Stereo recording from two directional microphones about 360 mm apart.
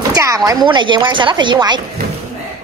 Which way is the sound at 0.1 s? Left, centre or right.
Centre.